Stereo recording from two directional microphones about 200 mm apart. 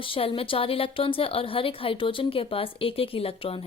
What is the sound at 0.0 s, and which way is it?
A woman's voice, 25° left (ahead or behind).